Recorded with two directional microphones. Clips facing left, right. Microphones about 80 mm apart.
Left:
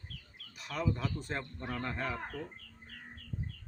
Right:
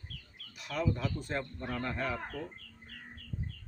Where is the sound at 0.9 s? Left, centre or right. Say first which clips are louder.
Right 2 dB; left.